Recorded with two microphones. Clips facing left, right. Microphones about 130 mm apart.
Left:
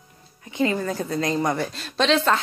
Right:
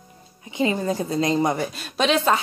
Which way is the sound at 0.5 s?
20° right (ahead or behind).